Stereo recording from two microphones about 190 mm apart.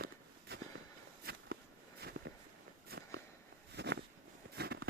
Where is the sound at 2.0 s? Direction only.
60° right (ahead or behind).